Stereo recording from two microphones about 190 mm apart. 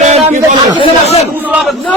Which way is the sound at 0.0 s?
35° right (ahead or behind).